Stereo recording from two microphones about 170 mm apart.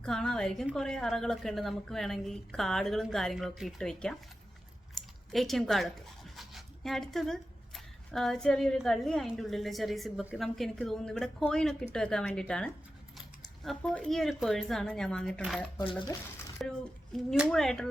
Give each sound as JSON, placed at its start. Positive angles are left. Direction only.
{"t": 0.0, "sound": "speech", "side_deg": 5}
{"t": 15.9, "sound": "speech", "side_deg": 30}
{"t": 16.6, "sound": "a child's voice", "side_deg": 5}